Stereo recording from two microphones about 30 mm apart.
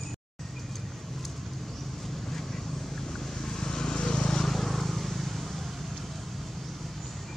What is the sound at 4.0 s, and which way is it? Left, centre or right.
Vehicle, left.